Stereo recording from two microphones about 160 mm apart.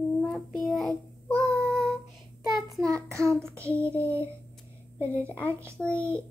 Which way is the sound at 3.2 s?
5° left (ahead or behind).